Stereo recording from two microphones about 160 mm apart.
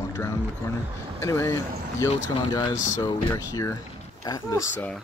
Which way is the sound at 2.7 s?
50° left (ahead or behind).